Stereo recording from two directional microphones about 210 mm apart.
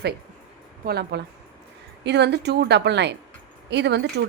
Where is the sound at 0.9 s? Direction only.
50° right (ahead or behind).